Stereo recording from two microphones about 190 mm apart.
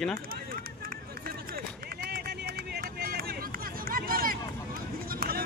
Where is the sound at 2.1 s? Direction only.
55° right (ahead or behind).